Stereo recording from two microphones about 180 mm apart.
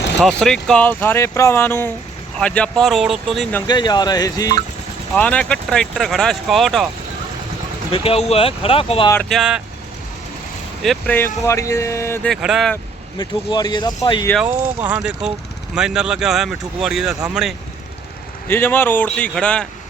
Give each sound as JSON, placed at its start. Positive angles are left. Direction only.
{"t": 0.2, "sound": "speech", "side_deg": 5}
{"t": 3.7, "sound": "speech", "side_deg": 25}
{"t": 5.1, "sound": "speech", "side_deg": 5}
{"t": 7.9, "sound": "speech", "side_deg": 30}
{"t": 9.3, "sound": "speech", "side_deg": -5}
{"t": 10.8, "sound": "speech", "side_deg": 10}
{"t": 12.3, "sound": "speech", "side_deg": 0}
{"t": 13.1, "sound": "speech", "side_deg": 25}
{"t": 14.4, "sound": "speech", "side_deg": -10}
{"t": 18.4, "sound": "speech", "side_deg": 10}